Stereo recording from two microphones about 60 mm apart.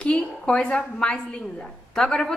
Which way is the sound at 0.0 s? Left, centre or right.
Centre.